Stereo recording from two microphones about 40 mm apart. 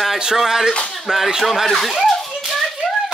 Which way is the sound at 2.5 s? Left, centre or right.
Centre.